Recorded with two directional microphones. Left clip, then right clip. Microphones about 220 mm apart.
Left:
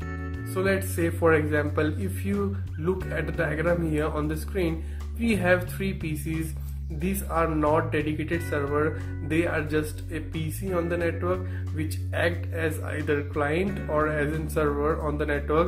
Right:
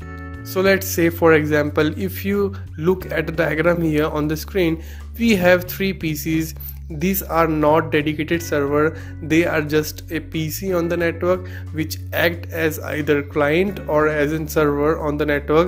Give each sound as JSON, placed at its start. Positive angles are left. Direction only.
{"t": 0.6, "sound": "speech", "side_deg": -40}